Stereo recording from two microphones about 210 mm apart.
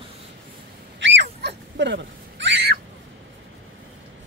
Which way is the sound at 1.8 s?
55° right (ahead or behind).